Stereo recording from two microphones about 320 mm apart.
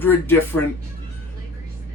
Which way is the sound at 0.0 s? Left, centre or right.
Centre.